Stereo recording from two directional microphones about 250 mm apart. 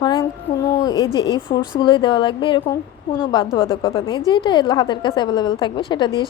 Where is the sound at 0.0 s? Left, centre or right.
Centre.